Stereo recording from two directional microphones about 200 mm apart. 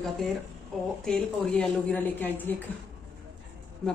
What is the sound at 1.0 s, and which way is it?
Speech, 5° left (ahead or behind).